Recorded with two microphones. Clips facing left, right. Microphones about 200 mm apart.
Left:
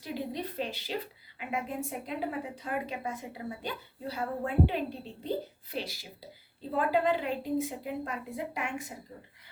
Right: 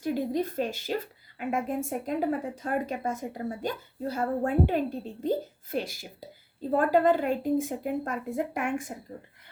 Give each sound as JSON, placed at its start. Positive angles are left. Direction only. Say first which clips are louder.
{"t": 0.0, "sound": "a woman's voice", "louder": "right 8 dB", "side_deg": -45}